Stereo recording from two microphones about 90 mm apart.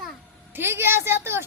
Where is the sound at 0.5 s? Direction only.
25° right (ahead or behind).